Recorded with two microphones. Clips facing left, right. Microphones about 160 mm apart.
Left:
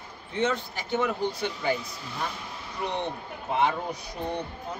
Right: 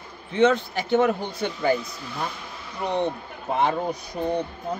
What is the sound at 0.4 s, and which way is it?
A man's voice, 70° right (ahead or behind).